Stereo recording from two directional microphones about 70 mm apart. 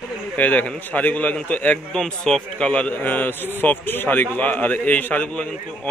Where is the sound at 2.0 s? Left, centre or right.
Centre.